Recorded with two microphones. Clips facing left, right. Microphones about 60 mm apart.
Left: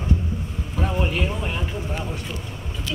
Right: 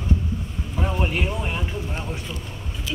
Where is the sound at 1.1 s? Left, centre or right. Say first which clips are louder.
Even; centre.